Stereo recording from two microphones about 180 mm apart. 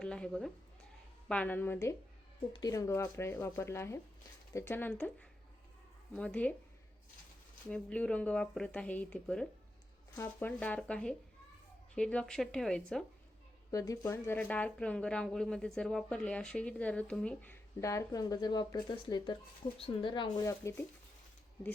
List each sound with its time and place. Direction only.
0.0 s speech: 5° left (ahead or behind)
6.1 s speech: 5° left (ahead or behind)
7.7 s speech: 5° left (ahead or behind)
13.7 s speech: 20° left (ahead or behind)